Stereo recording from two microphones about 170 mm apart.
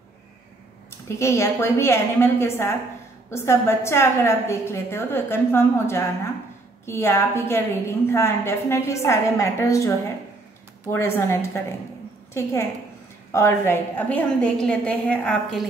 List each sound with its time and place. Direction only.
1.0 s a woman's voice: 15° left (ahead or behind)
10.9 s a woman's voice: 15° left (ahead or behind)